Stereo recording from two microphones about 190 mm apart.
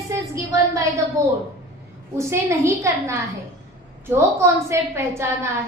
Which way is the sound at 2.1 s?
15° right (ahead or behind).